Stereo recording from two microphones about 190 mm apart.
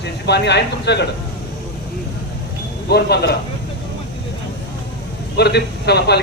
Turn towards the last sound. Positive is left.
turn(degrees=60)  # may be behind; listen again after turning